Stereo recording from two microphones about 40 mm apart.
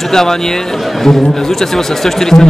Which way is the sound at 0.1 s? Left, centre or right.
Centre.